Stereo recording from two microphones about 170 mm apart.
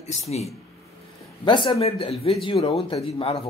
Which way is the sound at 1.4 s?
30° left (ahead or behind).